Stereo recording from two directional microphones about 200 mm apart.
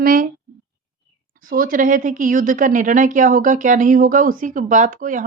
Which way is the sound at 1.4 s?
45° right (ahead or behind).